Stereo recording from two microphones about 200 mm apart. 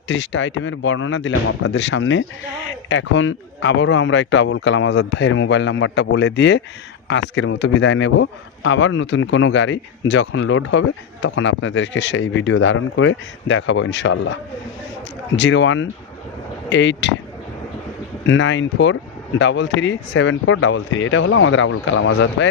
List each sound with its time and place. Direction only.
0.1 s a man's voice: 65° left (ahead or behind)
15.4 s a man's voice: 65° left (ahead or behind)
18.3 s a man's voice: 65° left (ahead or behind)